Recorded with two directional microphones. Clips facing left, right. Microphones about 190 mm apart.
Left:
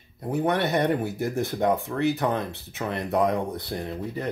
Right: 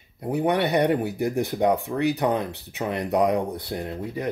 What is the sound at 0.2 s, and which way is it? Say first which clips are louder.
Speech: right 2 dB; 15° right (ahead or behind).